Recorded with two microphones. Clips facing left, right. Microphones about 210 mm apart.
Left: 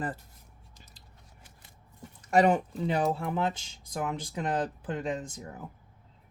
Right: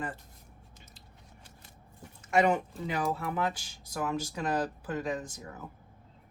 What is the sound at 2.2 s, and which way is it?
Speech, 35° left (ahead or behind).